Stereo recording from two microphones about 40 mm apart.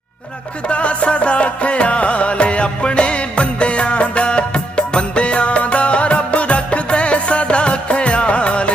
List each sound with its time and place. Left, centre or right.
0.7 s music: left